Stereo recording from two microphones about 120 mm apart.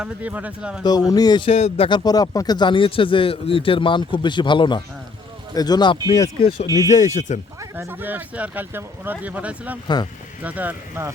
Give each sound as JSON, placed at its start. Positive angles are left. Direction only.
{"t": 0.0, "sound": "speech", "side_deg": -10}
{"t": 0.9, "sound": "speech", "side_deg": 30}
{"t": 1.5, "sound": "speech", "side_deg": 55}
{"t": 1.9, "sound": "speech", "side_deg": 35}
{"t": 6.9, "sound": "speech", "side_deg": 85}
{"t": 7.8, "sound": "speech", "side_deg": -15}
{"t": 9.8, "sound": "speech", "side_deg": 35}
{"t": 10.4, "sound": "speech", "side_deg": -15}